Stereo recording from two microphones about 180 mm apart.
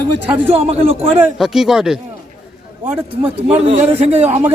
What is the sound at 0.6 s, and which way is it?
Speech, 35° right (ahead or behind).